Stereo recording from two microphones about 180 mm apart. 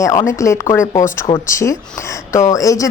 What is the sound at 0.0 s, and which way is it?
Speech, 20° left (ahead or behind).